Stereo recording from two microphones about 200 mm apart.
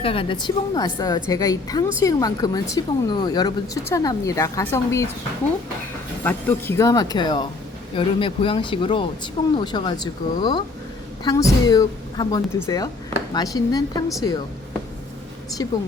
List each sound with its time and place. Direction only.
0.0 s a woman's voice: 25° left (ahead or behind)
6.2 s a woman's voice: 10° left (ahead or behind)